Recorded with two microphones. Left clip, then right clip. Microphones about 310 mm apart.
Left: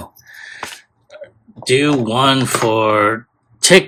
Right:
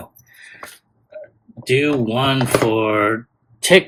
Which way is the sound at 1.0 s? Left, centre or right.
Centre.